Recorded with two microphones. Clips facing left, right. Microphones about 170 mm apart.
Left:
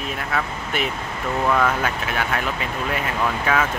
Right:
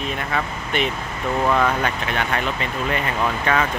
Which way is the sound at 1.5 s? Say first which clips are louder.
Left 1 dB; centre (ahead or behind).